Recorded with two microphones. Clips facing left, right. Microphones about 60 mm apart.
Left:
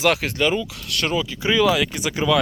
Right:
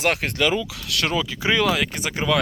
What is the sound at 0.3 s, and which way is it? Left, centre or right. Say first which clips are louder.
Speech: left 1 dB; right.